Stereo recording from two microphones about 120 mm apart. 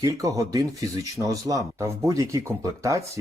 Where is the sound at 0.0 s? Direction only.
30° right (ahead or behind).